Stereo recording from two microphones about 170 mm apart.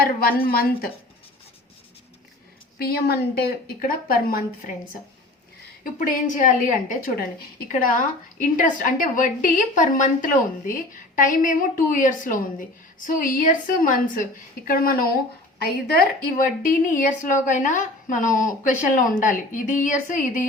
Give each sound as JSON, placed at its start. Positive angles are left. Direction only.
{"t": 0.0, "sound": "a woman's voice", "side_deg": 60}
{"t": 2.7, "sound": "a woman's voice", "side_deg": 70}
{"t": 5.8, "sound": "a woman's voice", "side_deg": 50}
{"t": 16.6, "sound": "a woman's voice", "side_deg": 50}